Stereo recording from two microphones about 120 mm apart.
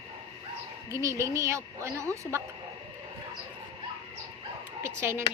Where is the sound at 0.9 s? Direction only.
25° right (ahead or behind).